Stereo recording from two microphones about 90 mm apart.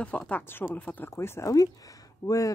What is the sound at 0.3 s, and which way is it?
Speech, 20° left (ahead or behind).